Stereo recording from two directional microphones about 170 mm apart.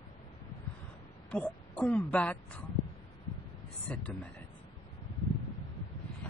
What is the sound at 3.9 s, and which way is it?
Speech, 5° left (ahead or behind).